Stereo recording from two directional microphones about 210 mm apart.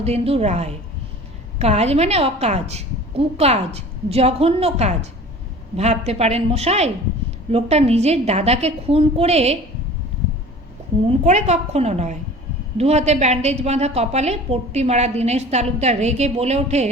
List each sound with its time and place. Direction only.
0.0 s a woman's voice: 30° right (ahead or behind)
11.1 s a woman's voice: 30° right (ahead or behind)